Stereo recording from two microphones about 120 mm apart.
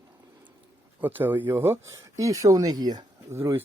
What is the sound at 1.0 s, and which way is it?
Speech, 15° right (ahead or behind).